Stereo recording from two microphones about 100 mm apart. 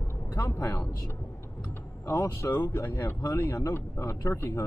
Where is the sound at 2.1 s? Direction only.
30° left (ahead or behind).